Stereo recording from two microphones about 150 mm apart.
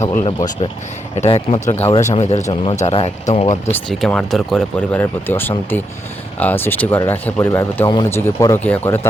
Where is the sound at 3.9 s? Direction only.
5° left (ahead or behind).